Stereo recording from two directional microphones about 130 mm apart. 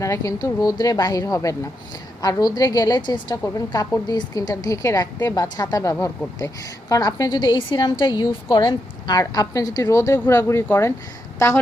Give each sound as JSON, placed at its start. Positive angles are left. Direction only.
{"t": 0.0, "sound": "a woman's voice", "side_deg": 25}